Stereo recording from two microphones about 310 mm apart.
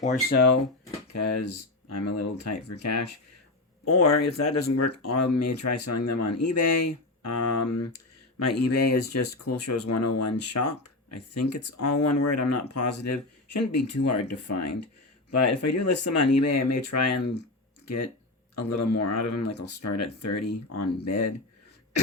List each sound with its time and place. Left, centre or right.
0.0 s speech: left
1.1 s speech: left